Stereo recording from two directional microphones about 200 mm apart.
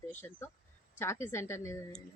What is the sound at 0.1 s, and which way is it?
Speech, 10° left (ahead or behind).